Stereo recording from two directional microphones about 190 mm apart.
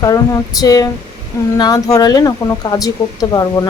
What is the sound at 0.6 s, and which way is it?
Speech, 20° left (ahead or behind).